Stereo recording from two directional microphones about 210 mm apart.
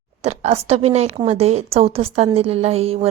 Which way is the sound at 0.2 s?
30° right (ahead or behind).